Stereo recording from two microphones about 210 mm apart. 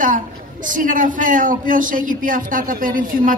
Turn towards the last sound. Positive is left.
turn(degrees=-40)  # may be behind; listen again after turning